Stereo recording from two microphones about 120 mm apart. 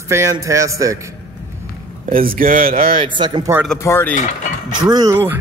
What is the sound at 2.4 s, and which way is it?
Speech, 90° right.